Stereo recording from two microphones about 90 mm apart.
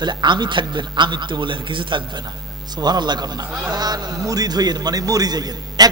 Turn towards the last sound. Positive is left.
turn(degrees=-45)  # may be behind; listen again after turning